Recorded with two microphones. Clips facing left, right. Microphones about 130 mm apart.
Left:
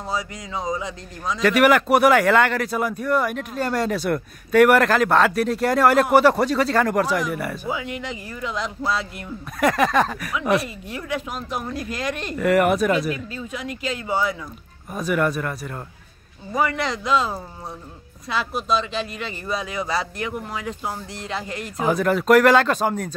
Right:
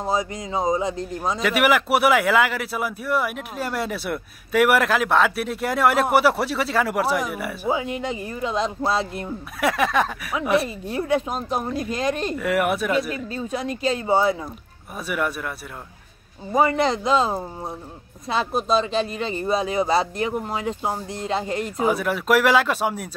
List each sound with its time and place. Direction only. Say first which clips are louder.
0.0 s a man's voice: right 4 dB; 25° right (ahead or behind)
1.4 s speech: left 4 dB; 5° right (ahead or behind)
7.6 s a man's voice: right 4 dB; 30° right (ahead or behind)
9.6 s speech: left 2 dB; centre (ahead or behind)
10.6 s a man's voice: right 5 dB; 30° right (ahead or behind)
12.4 s speech: left 8 dB; centre (ahead or behind)
13.1 s speech: right 2 dB; 35° right (ahead or behind)
15.0 s speech: left 4 dB; 5° right (ahead or behind)
16.5 s a man's voice: right 4 dB; 25° right (ahead or behind)
21.8 s speech: left 4 dB; 5° right (ahead or behind)